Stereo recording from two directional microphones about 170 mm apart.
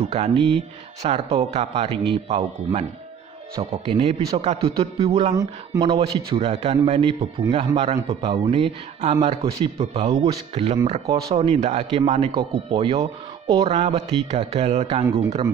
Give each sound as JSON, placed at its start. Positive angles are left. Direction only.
{"t": 0.0, "sound": "a man's voice", "side_deg": -40}
{"t": 5.3, "sound": "speech", "side_deg": -25}
{"t": 5.9, "sound": "a man's voice", "side_deg": -35}